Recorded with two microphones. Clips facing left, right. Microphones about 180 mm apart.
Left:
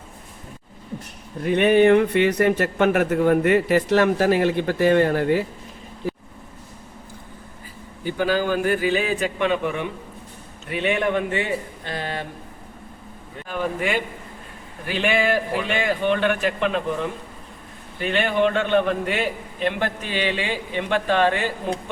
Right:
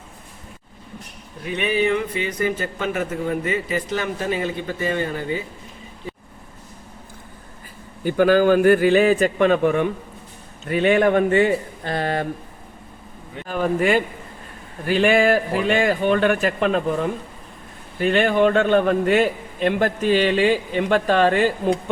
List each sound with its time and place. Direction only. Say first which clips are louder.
1.5 s speech: left 6 dB; 55° left (ahead or behind)
8.0 s a man's voice: right 7 dB; 50° right (ahead or behind)
13.5 s a man's voice: right 5 dB; 45° right (ahead or behind)